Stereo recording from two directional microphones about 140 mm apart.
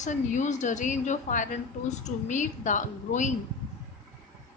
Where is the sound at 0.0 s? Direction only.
60° left (ahead or behind).